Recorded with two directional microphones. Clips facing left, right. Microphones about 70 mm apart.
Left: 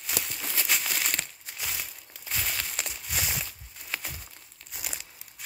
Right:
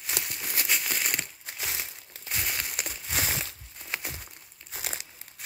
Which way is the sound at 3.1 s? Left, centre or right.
Right.